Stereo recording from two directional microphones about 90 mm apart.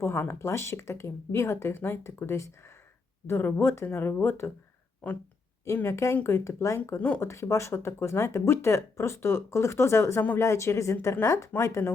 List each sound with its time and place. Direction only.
0.0 s speech: 25° left (ahead or behind)
5.6 s speech: 30° left (ahead or behind)